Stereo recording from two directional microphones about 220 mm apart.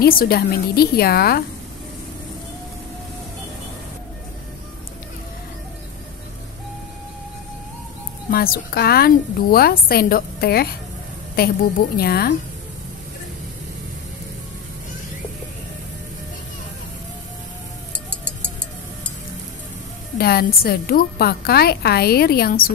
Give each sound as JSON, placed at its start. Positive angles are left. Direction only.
{"t": 0.0, "sound": "a woman's voice", "side_deg": 40}
{"t": 8.3, "sound": "a woman's voice", "side_deg": 45}
{"t": 20.2, "sound": "a woman's voice", "side_deg": 45}